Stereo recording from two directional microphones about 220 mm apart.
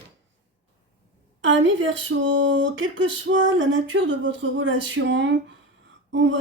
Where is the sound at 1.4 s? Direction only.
55° right (ahead or behind).